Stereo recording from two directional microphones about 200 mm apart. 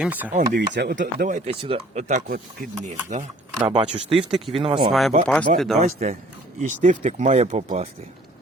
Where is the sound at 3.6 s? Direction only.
25° right (ahead or behind).